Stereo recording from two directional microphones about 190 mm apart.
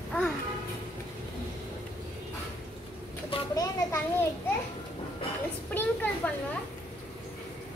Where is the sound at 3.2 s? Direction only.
20° left (ahead or behind).